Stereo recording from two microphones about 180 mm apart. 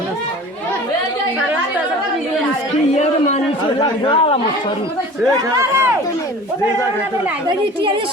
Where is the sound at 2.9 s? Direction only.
40° left (ahead or behind).